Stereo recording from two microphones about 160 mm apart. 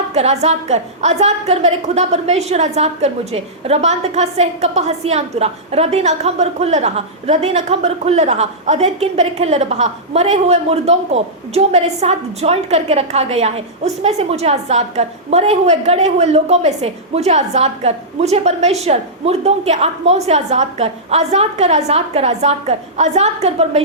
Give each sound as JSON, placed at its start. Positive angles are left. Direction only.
{"t": 0.1, "sound": "a woman's voice", "side_deg": -40}